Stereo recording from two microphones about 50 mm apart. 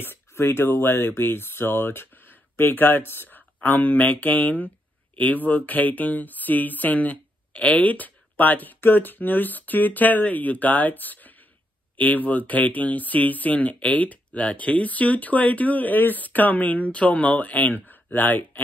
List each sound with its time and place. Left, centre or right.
0.0 s speech: left